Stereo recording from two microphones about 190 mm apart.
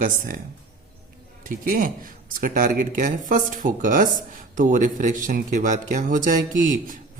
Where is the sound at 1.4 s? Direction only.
45° right (ahead or behind).